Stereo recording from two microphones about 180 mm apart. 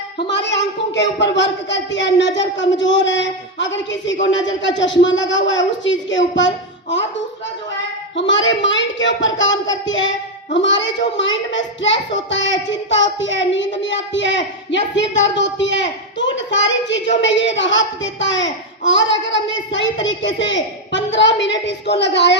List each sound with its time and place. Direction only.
0.3 s a child's voice: 75° left (ahead or behind)
8.1 s a child's voice: 90° left; by 22.4 s 70° left (ahead or behind)